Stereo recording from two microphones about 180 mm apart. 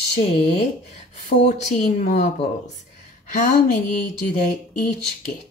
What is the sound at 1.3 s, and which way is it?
Speech, 45° left (ahead or behind).